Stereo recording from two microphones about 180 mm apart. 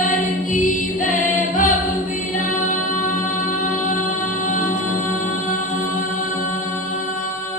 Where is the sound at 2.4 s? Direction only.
45° left (ahead or behind).